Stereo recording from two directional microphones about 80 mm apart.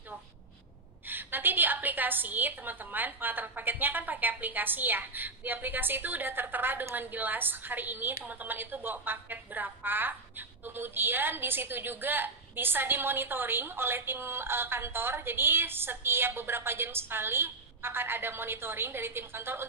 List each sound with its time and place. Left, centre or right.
1.0 s a woman's voice: right